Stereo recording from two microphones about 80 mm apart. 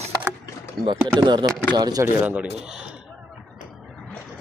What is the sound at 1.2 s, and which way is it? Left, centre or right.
Speech, right.